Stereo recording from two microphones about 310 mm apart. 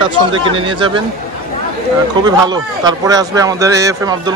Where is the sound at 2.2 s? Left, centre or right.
Centre.